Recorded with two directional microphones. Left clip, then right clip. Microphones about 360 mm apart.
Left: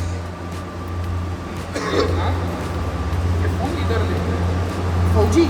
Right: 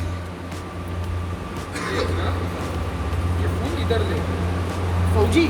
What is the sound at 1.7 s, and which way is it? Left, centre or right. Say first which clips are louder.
Chuckle: left 5 dB; centre.